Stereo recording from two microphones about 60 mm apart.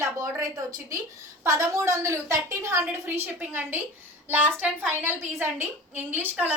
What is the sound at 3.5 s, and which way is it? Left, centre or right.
A woman's voice, right.